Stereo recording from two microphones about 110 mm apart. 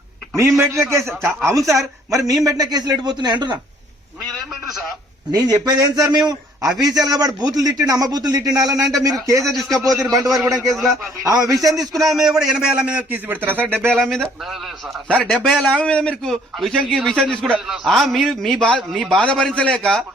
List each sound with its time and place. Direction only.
0.3 s a man's voice: 25° right (ahead or behind); by 3.6 s 40° right (ahead or behind)
5.3 s a man's voice: 30° right (ahead or behind)
8.8 s a man's voice: centre (ahead or behind)
10.0 s a man's voice: 35° right (ahead or behind)
10.8 s a man's voice: centre (ahead or behind)
11.2 s a man's voice: 30° right (ahead or behind)
11.9 s a man's voice: 5° right (ahead or behind); by 14.0 s 20° right (ahead or behind)
14.0 s a man's voice: 5° left (ahead or behind)
18.9 s a man's voice: 5° right (ahead or behind)
19.3 s a man's voice: 5° left (ahead or behind)